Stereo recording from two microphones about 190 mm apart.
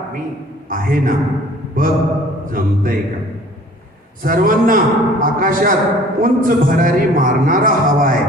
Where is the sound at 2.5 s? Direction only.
50° right (ahead or behind).